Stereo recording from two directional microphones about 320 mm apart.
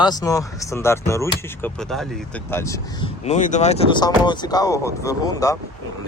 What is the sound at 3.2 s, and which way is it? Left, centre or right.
Speech, left.